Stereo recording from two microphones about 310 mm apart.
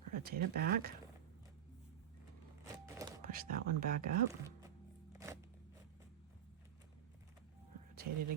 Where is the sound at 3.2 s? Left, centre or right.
Right.